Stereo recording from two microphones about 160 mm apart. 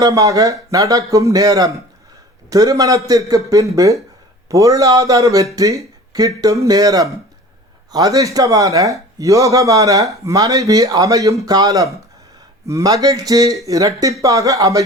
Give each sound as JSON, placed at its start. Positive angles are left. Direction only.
{"t": 0.0, "sound": "speech", "side_deg": -20}